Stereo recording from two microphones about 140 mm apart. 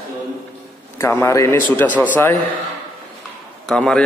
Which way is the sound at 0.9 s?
20° left (ahead or behind).